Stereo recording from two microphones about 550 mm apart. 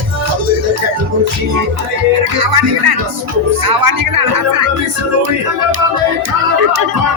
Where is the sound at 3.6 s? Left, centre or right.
Right.